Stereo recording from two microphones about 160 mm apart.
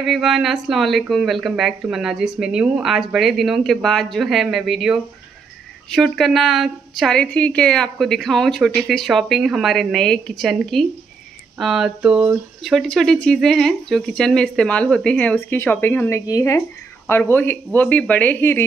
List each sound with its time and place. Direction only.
0.0 s a woman's voice: centre (ahead or behind)